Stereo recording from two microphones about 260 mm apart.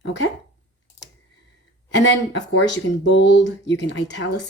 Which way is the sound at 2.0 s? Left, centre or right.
Left.